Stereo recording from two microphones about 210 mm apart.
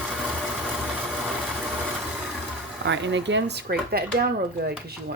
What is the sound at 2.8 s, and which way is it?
Speech, 60° right (ahead or behind).